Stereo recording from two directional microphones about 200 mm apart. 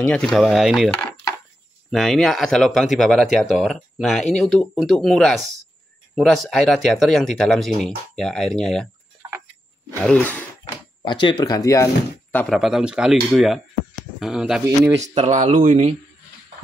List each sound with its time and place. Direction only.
0.0 s speech: 5° left (ahead or behind)
10.0 s speech: 10° left (ahead or behind)
10.6 s speech: 25° left (ahead or behind); by 14.6 s 5° right (ahead or behind)
15.0 s speech: 35° right (ahead or behind)